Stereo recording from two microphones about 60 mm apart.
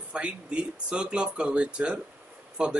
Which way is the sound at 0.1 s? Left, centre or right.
Centre.